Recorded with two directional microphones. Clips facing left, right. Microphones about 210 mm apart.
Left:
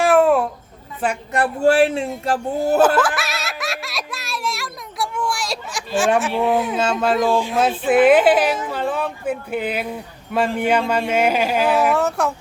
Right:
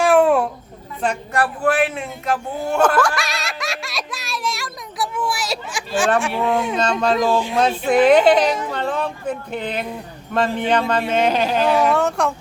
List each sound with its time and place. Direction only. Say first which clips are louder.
0.0 s a sound: even; centre (ahead or behind)
1.3 s speech: left 5 dB; 25° left (ahead or behind)
3.2 s giggle: even; 5° left (ahead or behind)
6.1 s speech: left 2 dB; 5° left (ahead or behind)